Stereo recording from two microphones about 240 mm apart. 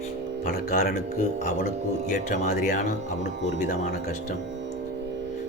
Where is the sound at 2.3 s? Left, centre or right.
Left.